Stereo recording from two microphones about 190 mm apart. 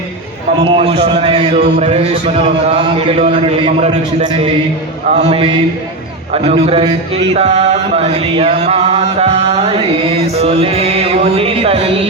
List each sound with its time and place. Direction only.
0.6 s speech: 30° right (ahead or behind)